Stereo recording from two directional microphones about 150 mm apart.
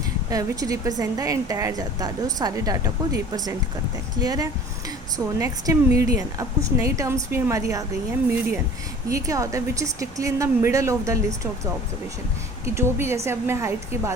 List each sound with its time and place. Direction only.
0.3 s a woman's voice: 25° right (ahead or behind)
9.0 s a woman's voice: 20° right (ahead or behind)